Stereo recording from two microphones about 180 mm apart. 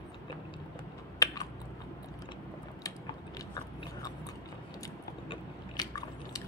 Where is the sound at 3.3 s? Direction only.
20° left (ahead or behind).